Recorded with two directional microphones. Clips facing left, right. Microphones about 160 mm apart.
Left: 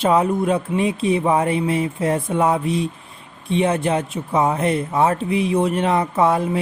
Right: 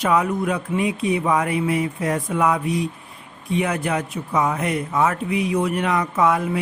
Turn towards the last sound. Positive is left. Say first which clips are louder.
# left 2 dB
turn(degrees=30)  # may be behind; listen again after turning